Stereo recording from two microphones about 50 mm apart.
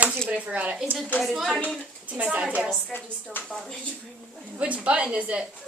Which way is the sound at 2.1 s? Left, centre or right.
Right.